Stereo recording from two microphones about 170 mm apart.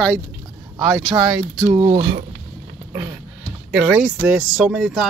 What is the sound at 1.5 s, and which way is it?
Speech, 10° right (ahead or behind).